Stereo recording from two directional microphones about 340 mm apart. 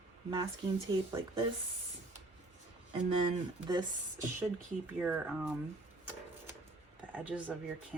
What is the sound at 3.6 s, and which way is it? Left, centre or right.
Speech, centre.